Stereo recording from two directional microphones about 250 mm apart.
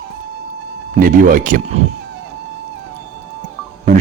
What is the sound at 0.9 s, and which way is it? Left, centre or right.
Speech, right.